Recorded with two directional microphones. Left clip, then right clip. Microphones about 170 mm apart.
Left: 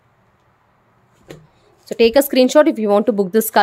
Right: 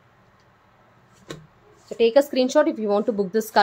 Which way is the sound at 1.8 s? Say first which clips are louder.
Left 5 dB; 80° left.